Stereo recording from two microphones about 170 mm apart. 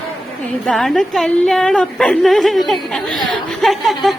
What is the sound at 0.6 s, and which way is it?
A woman's voice, centre (ahead or behind).